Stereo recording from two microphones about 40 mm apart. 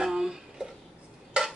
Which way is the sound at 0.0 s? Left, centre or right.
Centre.